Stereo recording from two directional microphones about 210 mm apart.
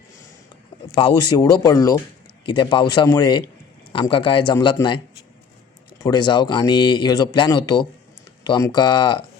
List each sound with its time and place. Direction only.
0.9 s speech: 20° left (ahead or behind)
6.0 s speech: 20° left (ahead or behind)